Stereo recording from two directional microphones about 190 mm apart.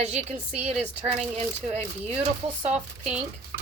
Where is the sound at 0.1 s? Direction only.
35° right (ahead or behind).